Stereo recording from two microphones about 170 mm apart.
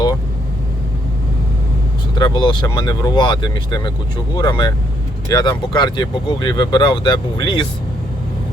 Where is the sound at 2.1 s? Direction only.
25° left (ahead or behind).